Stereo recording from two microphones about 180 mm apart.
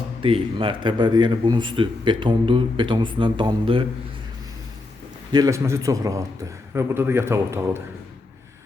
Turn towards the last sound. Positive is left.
turn(degrees=-15)  # may be behind; listen again after turning